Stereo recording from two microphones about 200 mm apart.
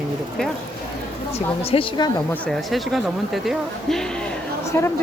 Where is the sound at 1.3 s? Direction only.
30° left (ahead or behind).